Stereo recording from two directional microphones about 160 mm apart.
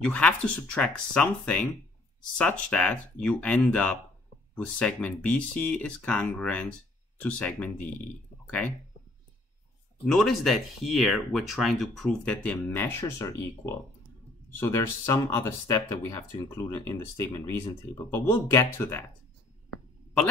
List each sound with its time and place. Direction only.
0.0 s speech: 5° left (ahead or behind)
10.0 s speech: centre (ahead or behind)